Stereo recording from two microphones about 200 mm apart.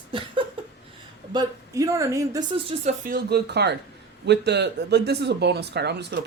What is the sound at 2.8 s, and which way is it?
Speech, 45° right (ahead or behind).